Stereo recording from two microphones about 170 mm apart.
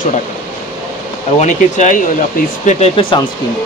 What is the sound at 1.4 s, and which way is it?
Speech, 45° left (ahead or behind).